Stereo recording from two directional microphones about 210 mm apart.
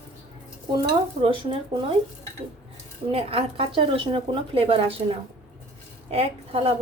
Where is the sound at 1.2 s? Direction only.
25° right (ahead or behind).